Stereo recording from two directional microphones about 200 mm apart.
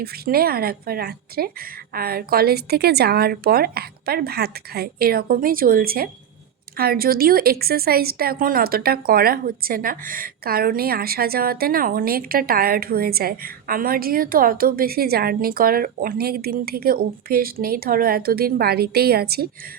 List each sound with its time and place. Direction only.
0.0 s speech: 50° right (ahead or behind)